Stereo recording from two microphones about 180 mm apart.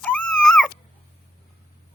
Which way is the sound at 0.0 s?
5° left (ahead or behind).